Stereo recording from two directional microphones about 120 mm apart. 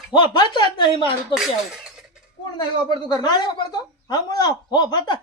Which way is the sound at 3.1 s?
35° left (ahead or behind).